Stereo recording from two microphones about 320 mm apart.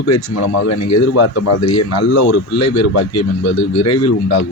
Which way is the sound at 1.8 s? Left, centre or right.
Left.